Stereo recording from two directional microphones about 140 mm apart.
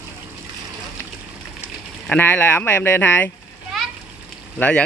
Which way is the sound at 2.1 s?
15° left (ahead or behind).